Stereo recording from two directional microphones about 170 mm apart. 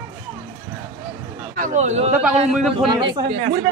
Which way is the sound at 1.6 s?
45° right (ahead or behind).